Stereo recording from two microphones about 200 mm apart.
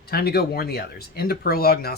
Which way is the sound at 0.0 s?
50° left (ahead or behind).